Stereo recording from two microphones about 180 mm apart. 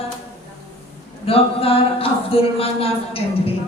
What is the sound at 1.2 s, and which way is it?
Music, 30° left (ahead or behind).